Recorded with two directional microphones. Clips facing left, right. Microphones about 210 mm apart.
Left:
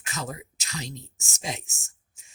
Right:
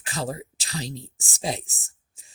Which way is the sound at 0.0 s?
30° right (ahead or behind).